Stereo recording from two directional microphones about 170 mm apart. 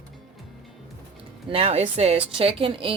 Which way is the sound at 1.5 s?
35° right (ahead or behind).